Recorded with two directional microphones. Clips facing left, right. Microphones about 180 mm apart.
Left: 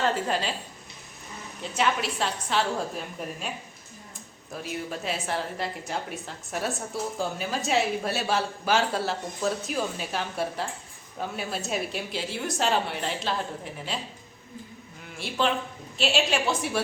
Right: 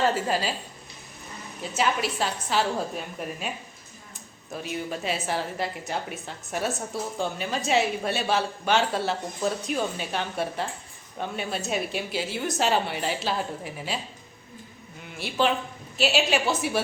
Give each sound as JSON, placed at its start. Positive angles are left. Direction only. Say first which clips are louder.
{"t": 0.0, "sound": "a woman's voice", "louder": "right 2 dB", "side_deg": -5}
{"t": 1.7, "sound": "a woman's voice", "louder": "right 1 dB", "side_deg": -5}
{"t": 15.2, "sound": "a woman's voice", "louder": "right 2 dB", "side_deg": 0}